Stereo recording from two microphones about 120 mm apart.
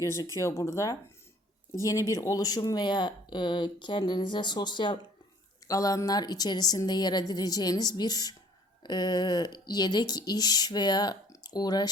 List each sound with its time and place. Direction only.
0.0 s speech: 25° left (ahead or behind)
5.6 s speech: 30° left (ahead or behind)